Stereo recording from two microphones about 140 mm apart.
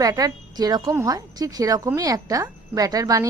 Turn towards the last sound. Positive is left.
turn(degrees=-25)  # may be behind; listen again after turning